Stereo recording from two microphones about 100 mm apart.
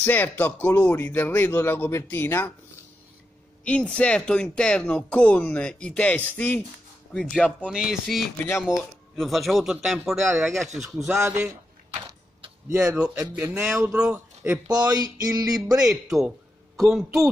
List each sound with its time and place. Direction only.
0.0 s speech: 20° left (ahead or behind)
3.6 s speech: 10° left (ahead or behind)
7.7 s speech: 5° right (ahead or behind)
11.1 s speech: 25° right (ahead or behind)
12.8 s speech: 10° right (ahead or behind)
14.7 s a sound: 45° right (ahead or behind)
15.8 s a man's voice: 5° right (ahead or behind)